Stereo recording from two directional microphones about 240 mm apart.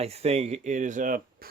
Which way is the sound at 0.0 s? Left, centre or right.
Right.